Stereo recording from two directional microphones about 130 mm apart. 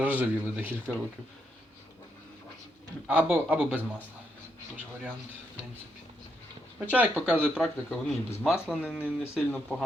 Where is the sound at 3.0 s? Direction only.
10° right (ahead or behind).